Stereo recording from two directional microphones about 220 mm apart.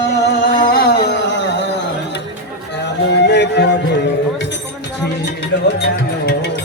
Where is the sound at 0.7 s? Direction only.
45° left (ahead or behind).